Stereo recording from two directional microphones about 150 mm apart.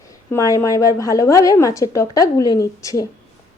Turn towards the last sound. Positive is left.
turn(degrees=20)  # may be behind; listen again after turning